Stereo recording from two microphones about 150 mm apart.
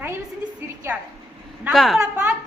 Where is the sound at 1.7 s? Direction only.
Centre (ahead or behind).